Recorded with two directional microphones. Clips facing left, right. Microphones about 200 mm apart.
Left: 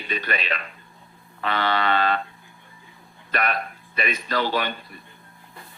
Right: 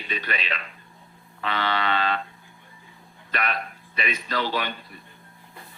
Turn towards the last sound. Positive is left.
turn(degrees=45)  # may be behind; listen again after turning